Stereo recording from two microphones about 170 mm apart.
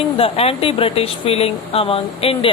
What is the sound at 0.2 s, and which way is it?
Speech, 35° left (ahead or behind).